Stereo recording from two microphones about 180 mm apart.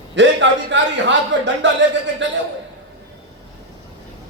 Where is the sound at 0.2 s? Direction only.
85° right.